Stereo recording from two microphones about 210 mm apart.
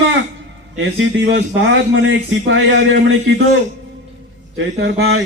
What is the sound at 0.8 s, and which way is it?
A man's voice, 60° right (ahead or behind).